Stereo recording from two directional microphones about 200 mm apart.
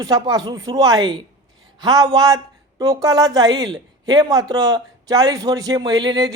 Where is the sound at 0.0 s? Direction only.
20° right (ahead or behind).